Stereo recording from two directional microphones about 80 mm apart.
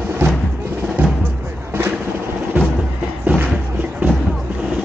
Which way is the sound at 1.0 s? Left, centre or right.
Right.